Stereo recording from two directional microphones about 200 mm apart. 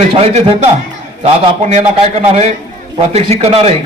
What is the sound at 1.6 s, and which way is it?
A man's voice, 35° right (ahead or behind).